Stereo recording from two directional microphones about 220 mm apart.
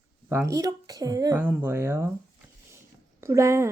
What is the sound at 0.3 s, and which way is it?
Speech, 10° right (ahead or behind).